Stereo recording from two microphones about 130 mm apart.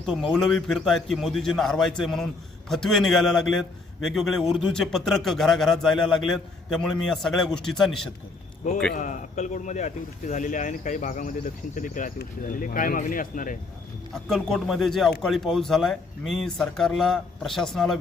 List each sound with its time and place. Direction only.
0.0 s a man's voice: centre (ahead or behind)
9.0 s speech: 70° left (ahead or behind); by 13.6 s 90° left
14.1 s a man's voice: 5° left (ahead or behind)